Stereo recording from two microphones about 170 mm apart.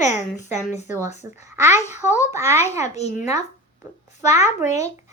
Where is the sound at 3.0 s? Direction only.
40° left (ahead or behind).